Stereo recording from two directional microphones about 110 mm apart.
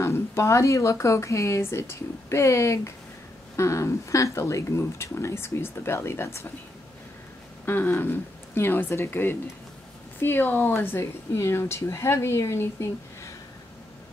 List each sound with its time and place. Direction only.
0.0 s speech: 25° left (ahead or behind)
7.6 s speech: 20° left (ahead or behind)